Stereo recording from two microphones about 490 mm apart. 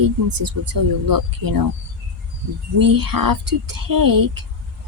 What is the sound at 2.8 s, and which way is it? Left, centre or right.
A woman's voice, right.